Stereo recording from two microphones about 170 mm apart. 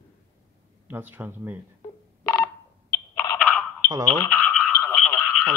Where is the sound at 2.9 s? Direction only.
20° left (ahead or behind).